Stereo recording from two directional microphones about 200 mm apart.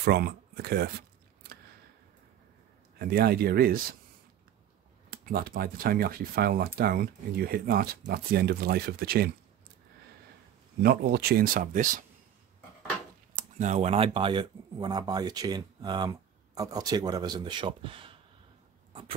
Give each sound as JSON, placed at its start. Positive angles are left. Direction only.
{"t": 0.0, "sound": "speech", "side_deg": -50}
{"t": 3.0, "sound": "speech", "side_deg": -50}
{"t": 5.1, "sound": "speech", "side_deg": -45}
{"t": 10.8, "sound": "speech", "side_deg": -50}
{"t": 13.4, "sound": "speech", "side_deg": -35}